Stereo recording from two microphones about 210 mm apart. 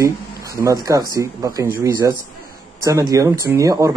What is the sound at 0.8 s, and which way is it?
Speech, 15° right (ahead or behind).